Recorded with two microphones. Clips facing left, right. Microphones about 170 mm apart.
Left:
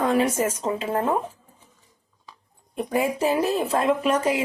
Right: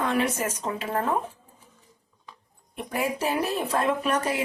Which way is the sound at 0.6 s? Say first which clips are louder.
Left 4 dB; 25° left (ahead or behind).